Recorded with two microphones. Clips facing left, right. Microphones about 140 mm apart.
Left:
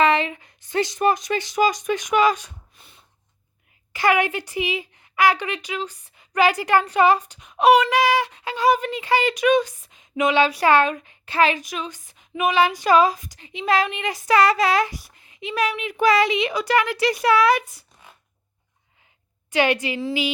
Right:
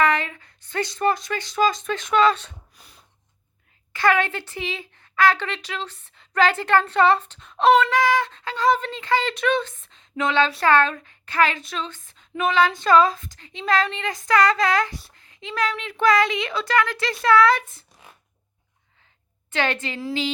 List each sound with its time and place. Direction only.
0.0 s speech: 20° left (ahead or behind)
2.7 s snort: centre (ahead or behind)
3.9 s speech: 15° left (ahead or behind)
19.5 s speech: 15° left (ahead or behind)